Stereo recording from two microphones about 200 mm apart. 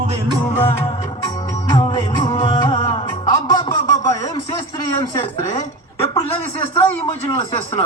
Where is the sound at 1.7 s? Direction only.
20° left (ahead or behind).